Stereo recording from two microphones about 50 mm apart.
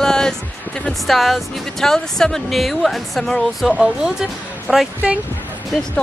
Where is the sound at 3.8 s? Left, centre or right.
Centre.